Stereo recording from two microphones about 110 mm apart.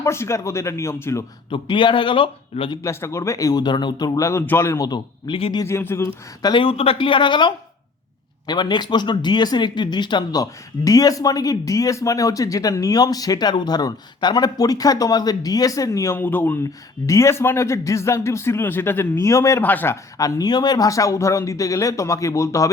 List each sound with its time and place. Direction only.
0.0 s speech: 25° left (ahead or behind)
1.5 s speech: 50° left (ahead or behind)
2.8 s speech: 25° left (ahead or behind); by 5.4 s 40° left (ahead or behind)
5.6 s speech: 25° left (ahead or behind)
6.4 s speech: 50° left (ahead or behind); by 16.1 s 30° left (ahead or behind)
16.1 s speech: 15° left (ahead or behind)
19.6 s speech: 15° left (ahead or behind)
20.1 s speech: 35° left (ahead or behind)